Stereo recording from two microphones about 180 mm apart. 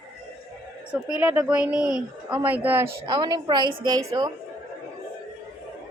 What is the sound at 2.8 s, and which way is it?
A woman's voice, 25° right (ahead or behind).